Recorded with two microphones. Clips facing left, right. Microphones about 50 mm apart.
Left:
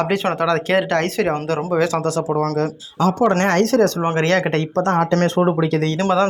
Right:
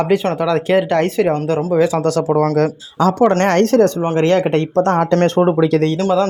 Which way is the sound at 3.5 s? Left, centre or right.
Right.